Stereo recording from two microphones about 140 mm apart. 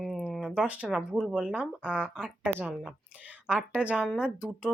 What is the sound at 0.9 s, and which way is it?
Speech, 5° right (ahead or behind).